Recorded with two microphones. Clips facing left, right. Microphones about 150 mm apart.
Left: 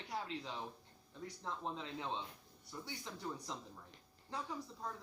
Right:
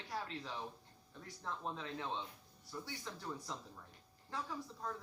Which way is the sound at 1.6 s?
20° left (ahead or behind).